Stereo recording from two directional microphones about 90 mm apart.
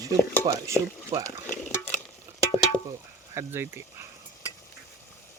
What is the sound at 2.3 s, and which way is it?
Stir, 30° right (ahead or behind).